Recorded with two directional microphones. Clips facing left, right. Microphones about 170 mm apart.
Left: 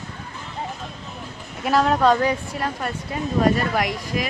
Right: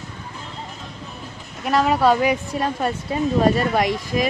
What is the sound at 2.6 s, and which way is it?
Speech, 25° right (ahead or behind).